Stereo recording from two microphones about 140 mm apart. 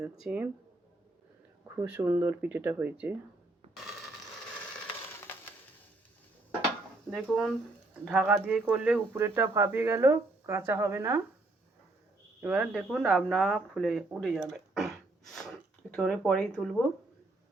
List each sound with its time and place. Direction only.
0.2 s speech: 10° right (ahead or behind)
1.6 s a sound: 15° right (ahead or behind)
2.0 s speech: 15° right (ahead or behind)
7.1 s speech: centre (ahead or behind); by 11.2 s 15° right (ahead or behind)
12.4 s speech: 10° right (ahead or behind)